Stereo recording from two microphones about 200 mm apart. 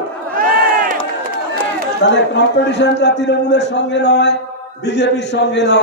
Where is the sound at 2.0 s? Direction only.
60° left (ahead or behind).